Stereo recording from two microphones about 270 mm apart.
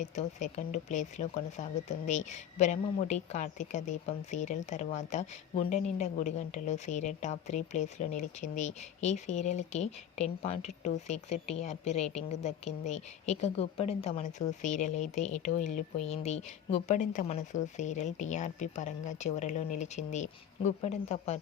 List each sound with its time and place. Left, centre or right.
0.0 s a woman's voice: left